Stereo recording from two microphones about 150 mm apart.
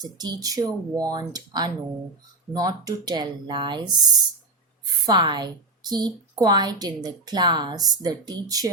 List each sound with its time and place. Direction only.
0.0 s a woman's voice: 25° right (ahead or behind)
5.0 s a woman's voice: 30° right (ahead or behind)